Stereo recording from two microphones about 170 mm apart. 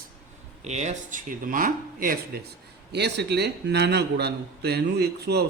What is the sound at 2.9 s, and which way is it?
A man's voice, 75° right (ahead or behind).